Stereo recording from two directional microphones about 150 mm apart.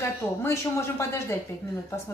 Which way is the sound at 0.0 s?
15° left (ahead or behind).